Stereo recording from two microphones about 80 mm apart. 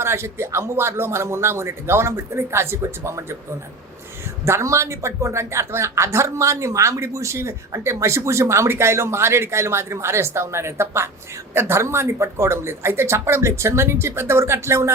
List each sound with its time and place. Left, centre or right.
0.0 s speech: right
4.4 s speech: right